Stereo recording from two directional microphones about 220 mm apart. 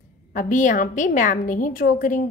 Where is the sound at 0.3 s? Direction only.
35° left (ahead or behind).